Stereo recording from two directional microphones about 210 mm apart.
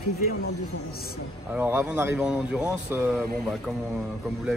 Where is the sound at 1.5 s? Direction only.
10° right (ahead or behind).